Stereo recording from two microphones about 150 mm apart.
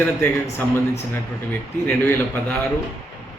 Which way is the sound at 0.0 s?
15° left (ahead or behind).